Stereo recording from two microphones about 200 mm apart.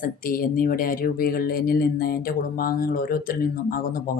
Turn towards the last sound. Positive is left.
turn(degrees=45)  # may be behind; listen again after turning